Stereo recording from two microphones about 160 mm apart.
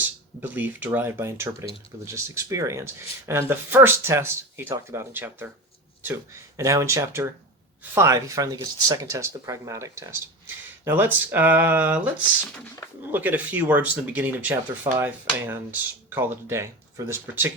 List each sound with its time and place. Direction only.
0.4 s speech: 10° right (ahead or behind)
6.6 s speech: 20° right (ahead or behind)